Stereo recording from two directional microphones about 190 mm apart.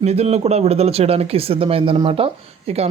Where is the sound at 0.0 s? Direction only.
35° right (ahead or behind).